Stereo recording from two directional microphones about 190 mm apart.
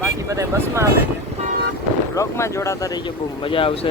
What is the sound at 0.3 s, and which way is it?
Speech, 15° right (ahead or behind).